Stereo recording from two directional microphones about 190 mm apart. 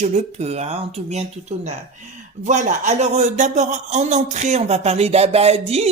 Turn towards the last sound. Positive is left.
turn(degrees=-35)  # may be behind; listen again after turning